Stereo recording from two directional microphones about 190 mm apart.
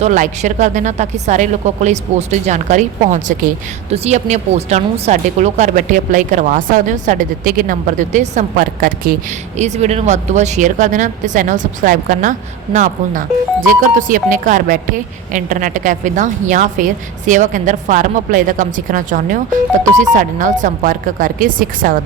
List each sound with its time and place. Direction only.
0.0 s speech: 40° right (ahead or behind)
9.6 s a woman's voice: 35° right (ahead or behind)